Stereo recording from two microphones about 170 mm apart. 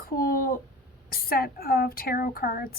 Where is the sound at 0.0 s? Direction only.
60° left (ahead or behind).